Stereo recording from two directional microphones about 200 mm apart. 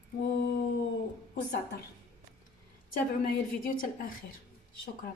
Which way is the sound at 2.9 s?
45° left (ahead or behind).